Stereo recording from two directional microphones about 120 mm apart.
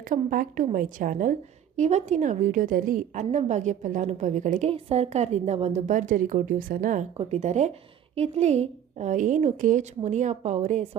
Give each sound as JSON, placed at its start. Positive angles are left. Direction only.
{"t": 0.1, "sound": "a woman's voice", "side_deg": -90}
{"t": 4.7, "sound": "a woman's voice", "side_deg": -60}
{"t": 7.3, "sound": "a woman's voice", "side_deg": -70}